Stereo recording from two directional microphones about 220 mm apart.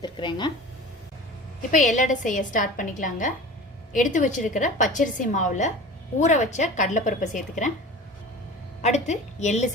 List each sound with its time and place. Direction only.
0.0 s speech: 20° left (ahead or behind)
1.7 s a woman's voice: 35° left (ahead or behind)
8.8 s a woman's voice: 30° left (ahead or behind)